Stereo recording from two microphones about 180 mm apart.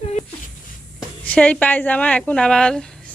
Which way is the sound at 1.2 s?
5° left (ahead or behind).